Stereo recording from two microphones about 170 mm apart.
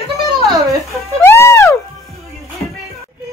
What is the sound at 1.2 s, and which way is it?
Music, 15° left (ahead or behind).